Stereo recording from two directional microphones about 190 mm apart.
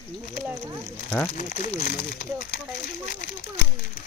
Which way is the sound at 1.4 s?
45° left (ahead or behind).